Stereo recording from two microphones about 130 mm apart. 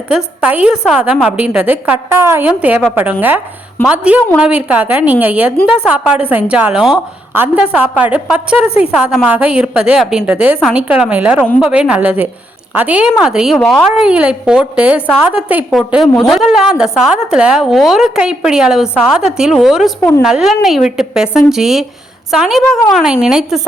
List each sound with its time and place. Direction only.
0.4 s a woman's voice: 10° right (ahead or behind)
8.5 s a woman's voice: 50° left (ahead or behind)
8.8 s a woman's voice: 10° right (ahead or behind)
13.6 s speech: 10° left (ahead or behind)
14.0 s a woman's voice: 10° right (ahead or behind)